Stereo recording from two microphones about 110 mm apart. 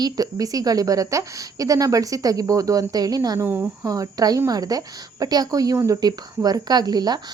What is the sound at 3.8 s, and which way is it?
Speech, 30° right (ahead or behind).